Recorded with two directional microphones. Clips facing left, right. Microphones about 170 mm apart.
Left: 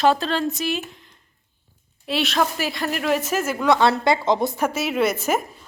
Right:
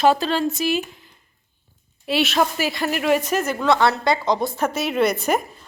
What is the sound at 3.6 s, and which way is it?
Speech, 15° left (ahead or behind).